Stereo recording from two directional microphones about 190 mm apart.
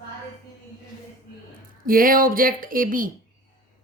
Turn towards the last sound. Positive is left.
turn(degrees=-45)  # may be behind; listen again after turning